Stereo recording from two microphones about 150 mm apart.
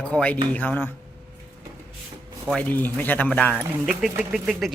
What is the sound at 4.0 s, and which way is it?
Speech, 5° right (ahead or behind).